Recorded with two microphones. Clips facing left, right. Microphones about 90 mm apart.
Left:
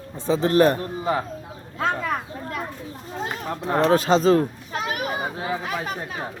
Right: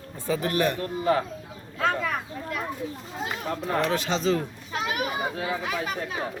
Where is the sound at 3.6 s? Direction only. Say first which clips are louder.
Left 8 dB; 30° left (ahead or behind).